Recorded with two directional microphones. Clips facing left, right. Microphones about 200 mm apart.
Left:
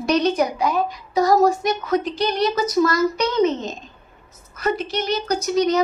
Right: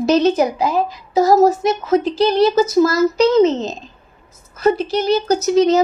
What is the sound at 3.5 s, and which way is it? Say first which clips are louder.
Speech: right 4 dB; 90° right.